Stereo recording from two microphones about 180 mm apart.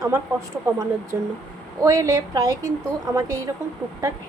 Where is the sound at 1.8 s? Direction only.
20° right (ahead or behind).